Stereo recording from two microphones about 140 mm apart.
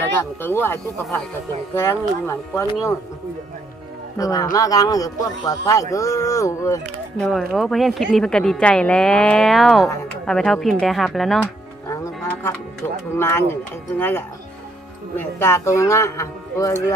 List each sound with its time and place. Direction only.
0.4 s speech: 15° left (ahead or behind)
4.2 s speech: 25° left (ahead or behind)
7.2 s a woman's voice: centre (ahead or behind)
11.9 s music: 20° left (ahead or behind)
13.1 s speech: 15° left (ahead or behind)